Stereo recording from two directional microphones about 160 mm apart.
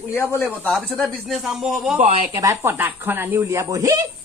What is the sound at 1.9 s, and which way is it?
Speech, 40° right (ahead or behind).